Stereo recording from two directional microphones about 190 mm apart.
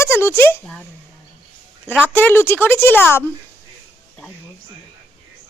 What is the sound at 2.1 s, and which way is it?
Speech, 10° left (ahead or behind).